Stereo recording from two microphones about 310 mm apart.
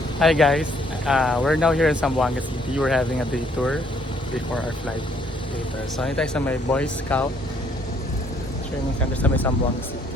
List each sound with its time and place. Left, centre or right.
0.2 s speech: centre
6.0 s speech: centre
9.2 s speech: centre